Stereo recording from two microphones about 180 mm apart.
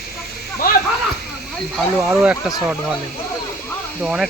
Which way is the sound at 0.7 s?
55° left (ahead or behind).